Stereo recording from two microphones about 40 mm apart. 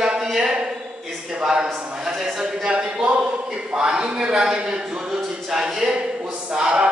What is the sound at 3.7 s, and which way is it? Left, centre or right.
Speech, centre.